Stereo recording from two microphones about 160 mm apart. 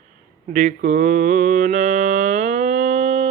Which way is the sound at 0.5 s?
50° right (ahead or behind).